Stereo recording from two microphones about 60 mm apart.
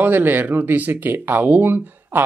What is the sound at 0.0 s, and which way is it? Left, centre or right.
Speech, right.